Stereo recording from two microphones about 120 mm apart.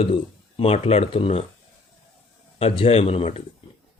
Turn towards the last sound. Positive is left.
turn(degrees=60)  # may be behind; listen again after turning